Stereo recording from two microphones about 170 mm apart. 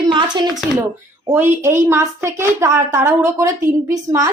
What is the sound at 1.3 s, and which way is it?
A woman's voice, 15° right (ahead or behind).